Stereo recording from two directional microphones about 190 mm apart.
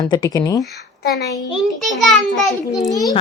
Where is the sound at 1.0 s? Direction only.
60° left (ahead or behind).